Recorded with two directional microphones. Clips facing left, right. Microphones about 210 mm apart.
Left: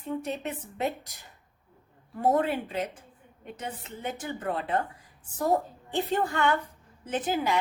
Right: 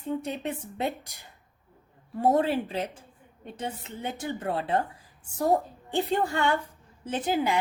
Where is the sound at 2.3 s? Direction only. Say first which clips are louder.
Right 2 dB; 30° right (ahead or behind).